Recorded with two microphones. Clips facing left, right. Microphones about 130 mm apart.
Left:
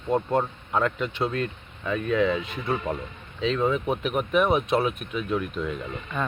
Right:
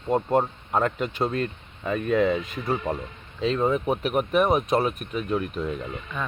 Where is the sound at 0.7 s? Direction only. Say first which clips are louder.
Right 1 dB; 40° right (ahead or behind).